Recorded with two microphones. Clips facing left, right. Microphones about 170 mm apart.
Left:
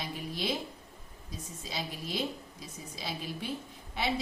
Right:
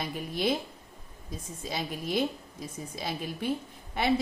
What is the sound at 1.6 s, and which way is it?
Speech, 55° right (ahead or behind).